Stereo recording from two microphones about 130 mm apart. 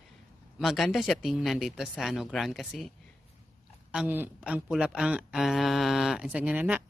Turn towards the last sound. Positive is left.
turn(degrees=-10)  # may be behind; listen again after turning